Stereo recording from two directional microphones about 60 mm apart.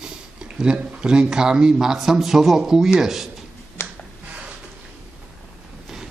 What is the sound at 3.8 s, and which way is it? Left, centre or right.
Finger snapping, left.